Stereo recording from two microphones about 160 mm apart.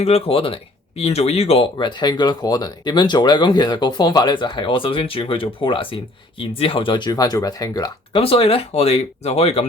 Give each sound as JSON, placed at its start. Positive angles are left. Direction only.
{"t": 0.0, "sound": "speech", "side_deg": 40}
{"t": 8.2, "sound": "speech", "side_deg": 35}